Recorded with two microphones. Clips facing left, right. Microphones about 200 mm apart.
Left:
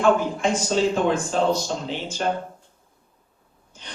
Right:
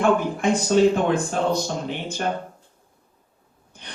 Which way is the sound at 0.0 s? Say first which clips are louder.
Even; 60° right (ahead or behind).